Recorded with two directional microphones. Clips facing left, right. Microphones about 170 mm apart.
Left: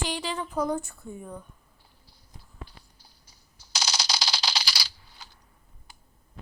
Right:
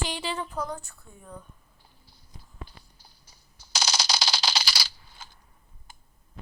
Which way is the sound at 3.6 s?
50° right (ahead or behind).